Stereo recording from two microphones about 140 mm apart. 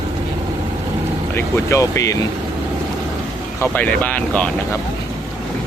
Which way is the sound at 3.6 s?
10° left (ahead or behind).